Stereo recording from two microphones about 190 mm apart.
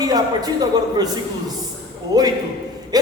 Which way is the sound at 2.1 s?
20° right (ahead or behind).